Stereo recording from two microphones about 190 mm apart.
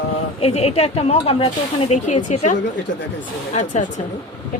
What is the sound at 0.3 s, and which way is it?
A woman's voice, 30° left (ahead or behind).